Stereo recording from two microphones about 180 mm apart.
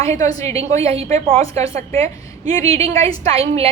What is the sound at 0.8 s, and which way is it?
Speech, 35° right (ahead or behind).